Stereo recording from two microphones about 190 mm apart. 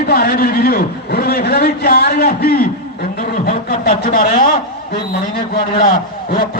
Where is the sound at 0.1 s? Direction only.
50° left (ahead or behind).